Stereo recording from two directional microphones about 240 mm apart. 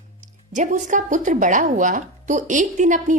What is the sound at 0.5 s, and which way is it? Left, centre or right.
A woman's voice, right.